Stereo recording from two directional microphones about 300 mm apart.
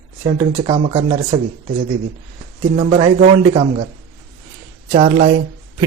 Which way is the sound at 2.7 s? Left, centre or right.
Centre.